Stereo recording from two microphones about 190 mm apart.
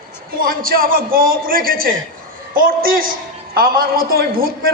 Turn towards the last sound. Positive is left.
turn(degrees=-50)  # may be behind; listen again after turning